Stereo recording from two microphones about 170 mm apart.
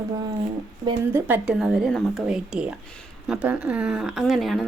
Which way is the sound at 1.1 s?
10° right (ahead or behind).